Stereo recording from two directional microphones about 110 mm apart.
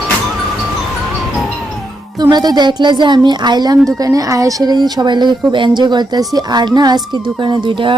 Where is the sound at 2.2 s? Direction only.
40° right (ahead or behind).